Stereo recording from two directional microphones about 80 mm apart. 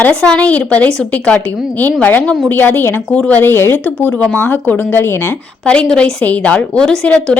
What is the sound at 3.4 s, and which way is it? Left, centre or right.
A woman's voice, left.